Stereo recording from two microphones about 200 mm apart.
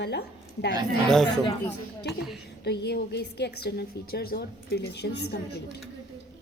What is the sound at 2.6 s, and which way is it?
A woman's voice, 55° left (ahead or behind).